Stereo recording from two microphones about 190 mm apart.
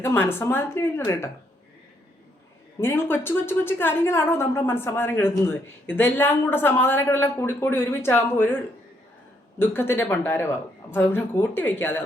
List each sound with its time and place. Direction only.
0.0 s a woman's voice: 10° left (ahead or behind)
2.8 s a woman's voice: 10° left (ahead or behind)
9.6 s a woman's voice: 10° left (ahead or behind)